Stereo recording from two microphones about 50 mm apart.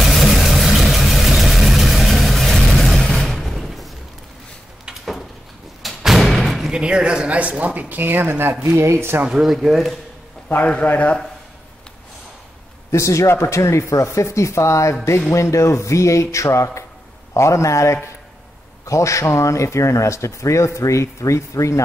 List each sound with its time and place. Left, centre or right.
0.0 s vehicle: centre
5.8 s thump: centre
6.7 s speech: centre; by 8.6 s right
8.7 s speech: right
9.3 s speech: centre
10.9 s a man's voice: left
12.9 s speech: left
17.3 s speech: left